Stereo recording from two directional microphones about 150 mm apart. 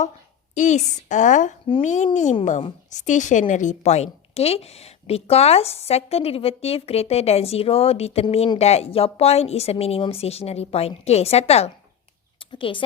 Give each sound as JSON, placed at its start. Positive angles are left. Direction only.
{"t": 0.5, "sound": "a woman's voice", "side_deg": 55}
{"t": 12.5, "sound": "speech", "side_deg": 35}